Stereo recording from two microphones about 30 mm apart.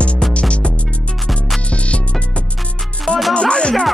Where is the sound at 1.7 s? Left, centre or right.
Left.